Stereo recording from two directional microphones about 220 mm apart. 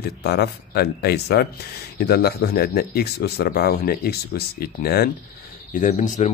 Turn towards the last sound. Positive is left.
turn(degrees=30)  # may be behind; listen again after turning